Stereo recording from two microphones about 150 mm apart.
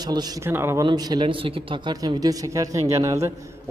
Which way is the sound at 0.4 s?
15° right (ahead or behind).